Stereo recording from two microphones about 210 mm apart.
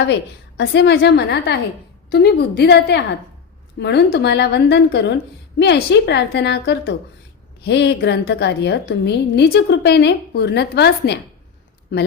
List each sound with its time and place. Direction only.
0.1 s a woman's voice: 55° left (ahead or behind)